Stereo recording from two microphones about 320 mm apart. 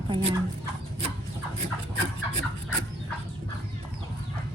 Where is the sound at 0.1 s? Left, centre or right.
Centre.